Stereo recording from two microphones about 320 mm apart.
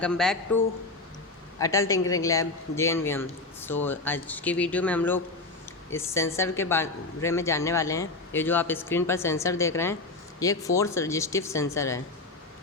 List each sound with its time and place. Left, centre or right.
0.0 s a man's voice: centre